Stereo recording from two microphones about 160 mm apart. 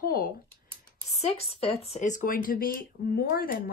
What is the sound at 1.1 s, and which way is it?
Speech, 40° left (ahead or behind).